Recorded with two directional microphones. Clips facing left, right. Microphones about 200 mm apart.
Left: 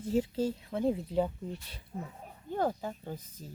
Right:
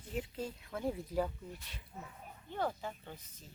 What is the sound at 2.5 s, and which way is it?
Speech, 45° left (ahead or behind).